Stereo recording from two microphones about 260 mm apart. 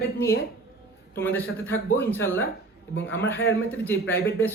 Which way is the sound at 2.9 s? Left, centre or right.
Left.